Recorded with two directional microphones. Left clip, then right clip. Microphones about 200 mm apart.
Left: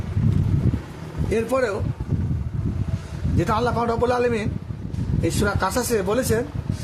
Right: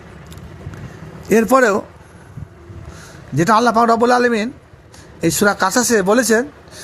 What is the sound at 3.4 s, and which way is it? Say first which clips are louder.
Speech: right 9 dB; 30° right (ahead or behind).